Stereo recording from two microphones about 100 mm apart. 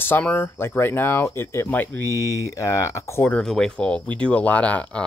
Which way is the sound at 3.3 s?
5° left (ahead or behind).